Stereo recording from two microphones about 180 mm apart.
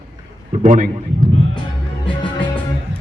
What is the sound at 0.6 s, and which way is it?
Speech, 45° right (ahead or behind).